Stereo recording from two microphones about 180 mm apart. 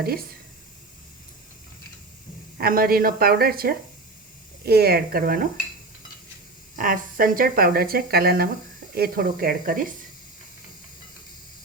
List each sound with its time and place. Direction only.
2.6 s speech: 55° right (ahead or behind)
6.7 s speech: 50° right (ahead or behind)